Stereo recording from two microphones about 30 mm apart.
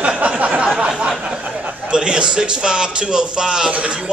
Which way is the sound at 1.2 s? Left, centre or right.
Right.